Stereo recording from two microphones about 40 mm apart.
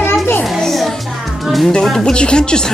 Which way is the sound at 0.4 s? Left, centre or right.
Centre.